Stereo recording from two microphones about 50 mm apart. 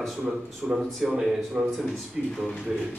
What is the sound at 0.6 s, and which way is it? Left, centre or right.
Speech, centre.